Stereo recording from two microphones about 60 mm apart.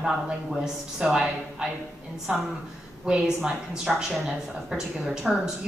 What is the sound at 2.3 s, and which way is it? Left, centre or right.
Speech, right.